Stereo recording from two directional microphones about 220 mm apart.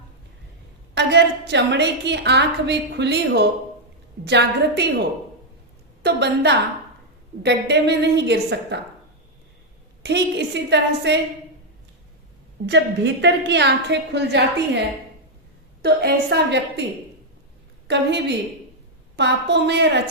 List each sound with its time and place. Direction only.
0.9 s a woman's voice: 50° right (ahead or behind)
6.0 s a woman's voice: 50° right (ahead or behind)
10.0 s a woman's voice: 50° right (ahead or behind)
12.6 s a woman's voice: 55° right (ahead or behind)
15.8 s a woman's voice: 50° right (ahead or behind)
17.8 s a woman's voice: 50° right (ahead or behind)